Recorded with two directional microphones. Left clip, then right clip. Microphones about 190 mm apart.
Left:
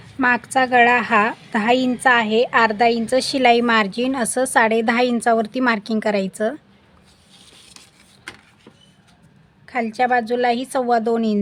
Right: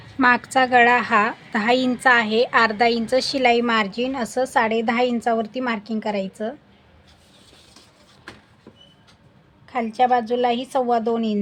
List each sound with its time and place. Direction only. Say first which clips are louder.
0.2 s a woman's voice: even; 20° left (ahead or behind); by 6.6 s 50° left (ahead or behind)
9.6 s a woman's voice: even; 30° left (ahead or behind)